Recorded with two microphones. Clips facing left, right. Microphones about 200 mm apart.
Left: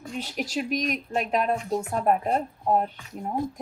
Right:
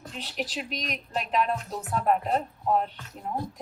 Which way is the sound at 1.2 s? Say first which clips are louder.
Left 1 dB; 50° left (ahead or behind).